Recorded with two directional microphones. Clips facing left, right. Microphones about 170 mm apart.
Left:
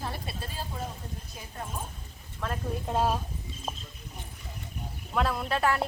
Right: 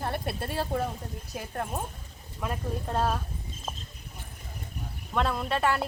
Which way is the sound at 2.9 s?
10° left (ahead or behind).